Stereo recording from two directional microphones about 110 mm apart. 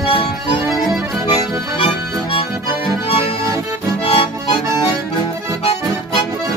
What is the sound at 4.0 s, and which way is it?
Accordion, 50° left (ahead or behind).